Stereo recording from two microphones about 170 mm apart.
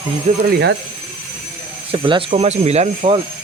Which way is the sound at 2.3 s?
40° right (ahead or behind).